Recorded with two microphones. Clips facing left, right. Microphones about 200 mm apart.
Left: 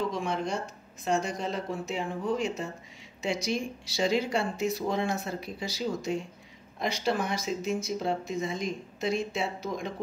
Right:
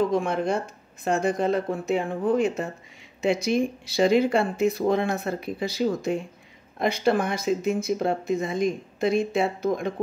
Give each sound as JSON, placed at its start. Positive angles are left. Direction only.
{"t": 0.1, "sound": "speech", "side_deg": -55}